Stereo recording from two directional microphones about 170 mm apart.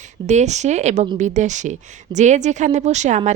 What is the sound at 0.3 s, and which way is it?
A woman's voice, 45° right (ahead or behind).